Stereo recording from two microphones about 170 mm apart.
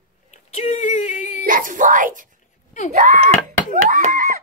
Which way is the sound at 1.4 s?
55° right (ahead or behind).